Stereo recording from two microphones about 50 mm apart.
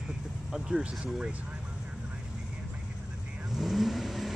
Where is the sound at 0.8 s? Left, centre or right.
Right.